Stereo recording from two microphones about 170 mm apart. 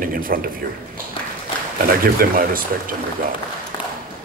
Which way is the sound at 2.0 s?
60° right (ahead or behind).